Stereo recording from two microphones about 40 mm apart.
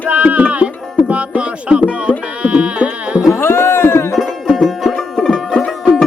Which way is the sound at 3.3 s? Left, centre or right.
Left.